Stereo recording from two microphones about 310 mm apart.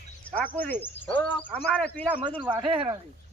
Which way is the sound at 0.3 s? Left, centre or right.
Centre.